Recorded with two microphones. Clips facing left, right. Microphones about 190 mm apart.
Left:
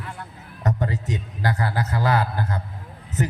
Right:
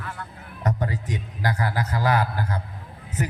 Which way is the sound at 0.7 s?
20° left (ahead or behind).